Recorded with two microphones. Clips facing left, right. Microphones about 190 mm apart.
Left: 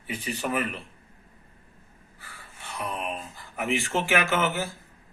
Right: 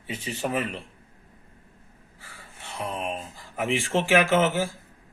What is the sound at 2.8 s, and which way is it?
Speech, 25° right (ahead or behind).